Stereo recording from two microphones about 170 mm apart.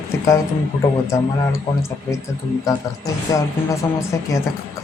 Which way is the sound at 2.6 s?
20° left (ahead or behind).